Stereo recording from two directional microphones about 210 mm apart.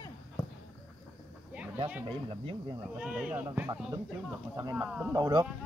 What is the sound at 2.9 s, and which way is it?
Speech, 5° right (ahead or behind).